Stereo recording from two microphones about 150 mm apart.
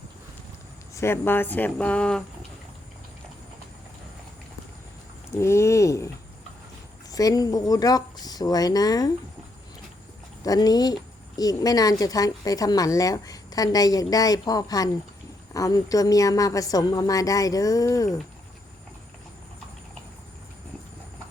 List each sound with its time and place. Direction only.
0.9 s speech: 15° left (ahead or behind)
5.3 s a woman's voice: 20° left (ahead or behind)
7.1 s a woman's voice: 25° left (ahead or behind)
10.4 s a woman's voice: 25° left (ahead or behind)